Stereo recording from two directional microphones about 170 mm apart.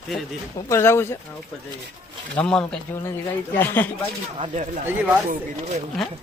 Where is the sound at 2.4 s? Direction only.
5° left (ahead or behind).